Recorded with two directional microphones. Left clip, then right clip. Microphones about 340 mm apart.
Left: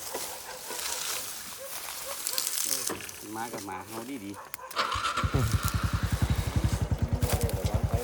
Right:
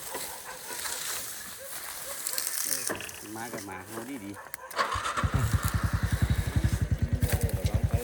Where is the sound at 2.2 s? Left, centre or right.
Centre.